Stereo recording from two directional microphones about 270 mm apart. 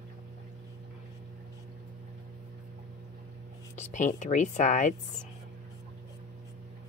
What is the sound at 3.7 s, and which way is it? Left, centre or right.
Speech, left.